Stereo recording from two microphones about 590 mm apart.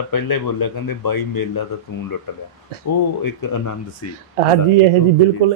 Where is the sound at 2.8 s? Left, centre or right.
Left.